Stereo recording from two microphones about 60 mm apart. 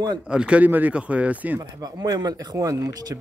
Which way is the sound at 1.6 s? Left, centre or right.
Right.